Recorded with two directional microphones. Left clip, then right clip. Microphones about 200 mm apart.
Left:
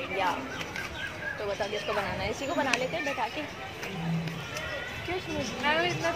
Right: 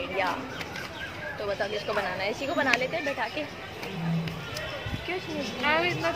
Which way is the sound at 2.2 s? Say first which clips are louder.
Right 2 dB; 10° left (ahead or behind).